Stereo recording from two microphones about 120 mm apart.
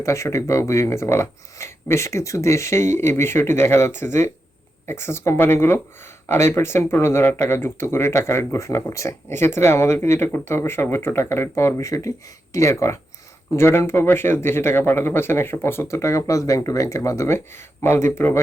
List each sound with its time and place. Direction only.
0.0 s speech: 25° left (ahead or behind)